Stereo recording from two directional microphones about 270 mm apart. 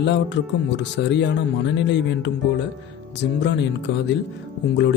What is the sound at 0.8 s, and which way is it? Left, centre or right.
Speech, left.